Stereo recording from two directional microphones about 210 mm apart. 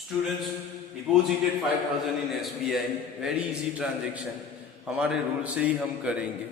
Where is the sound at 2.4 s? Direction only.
Centre (ahead or behind).